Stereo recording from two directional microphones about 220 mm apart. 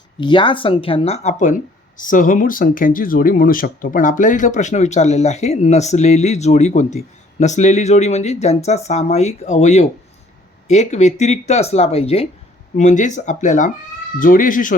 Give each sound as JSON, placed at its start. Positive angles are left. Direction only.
{"t": 0.2, "sound": "speech", "side_deg": 20}